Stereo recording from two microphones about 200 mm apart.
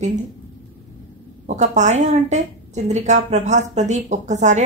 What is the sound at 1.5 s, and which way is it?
Speech, 35° right (ahead or behind).